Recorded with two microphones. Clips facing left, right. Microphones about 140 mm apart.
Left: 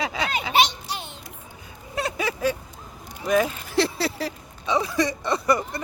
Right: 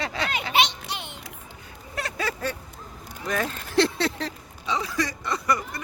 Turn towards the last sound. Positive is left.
turn(degrees=25)  # may be behind; listen again after turning